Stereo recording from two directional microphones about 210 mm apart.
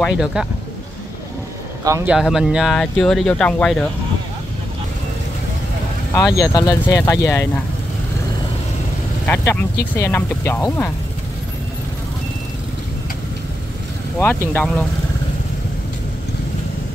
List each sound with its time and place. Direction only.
0.0 s speech: 5° right (ahead or behind)
1.9 s speech: 15° right (ahead or behind)
2.1 s speech: 5° right (ahead or behind)
6.1 s speech: 15° left (ahead or behind)
9.2 s speech: 10° left (ahead or behind)
14.2 s speech: 10° left (ahead or behind)